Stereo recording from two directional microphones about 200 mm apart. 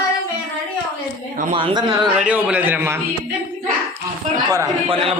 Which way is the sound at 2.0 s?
5° right (ahead or behind).